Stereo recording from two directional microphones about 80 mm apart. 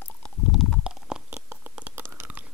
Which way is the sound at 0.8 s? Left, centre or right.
Centre.